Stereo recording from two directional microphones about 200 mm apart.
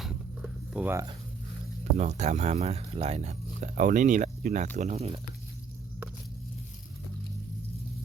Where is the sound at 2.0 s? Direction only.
35° right (ahead or behind).